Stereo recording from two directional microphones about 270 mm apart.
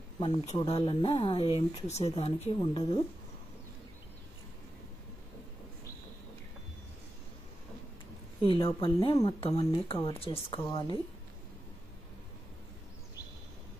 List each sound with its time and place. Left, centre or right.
0.2 s speech: left
8.5 s speech: centre